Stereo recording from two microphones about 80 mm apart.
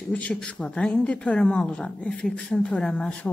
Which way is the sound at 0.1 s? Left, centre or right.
Centre.